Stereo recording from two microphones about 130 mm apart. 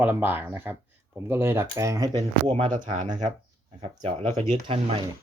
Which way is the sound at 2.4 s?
45° right (ahead or behind).